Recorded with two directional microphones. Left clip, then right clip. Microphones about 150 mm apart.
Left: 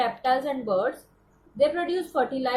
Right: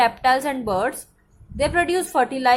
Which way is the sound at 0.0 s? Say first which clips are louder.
Right 6 dB; 50° right (ahead or behind).